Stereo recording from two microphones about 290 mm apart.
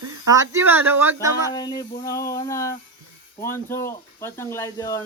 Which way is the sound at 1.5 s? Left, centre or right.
Centre.